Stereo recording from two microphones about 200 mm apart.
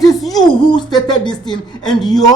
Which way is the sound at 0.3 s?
20° left (ahead or behind).